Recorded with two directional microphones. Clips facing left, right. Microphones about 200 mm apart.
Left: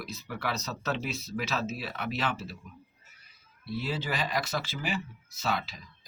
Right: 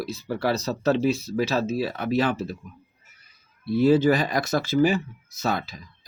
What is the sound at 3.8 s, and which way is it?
Speech, 45° right (ahead or behind).